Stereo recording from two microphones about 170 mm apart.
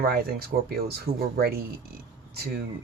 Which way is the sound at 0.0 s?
60° right (ahead or behind).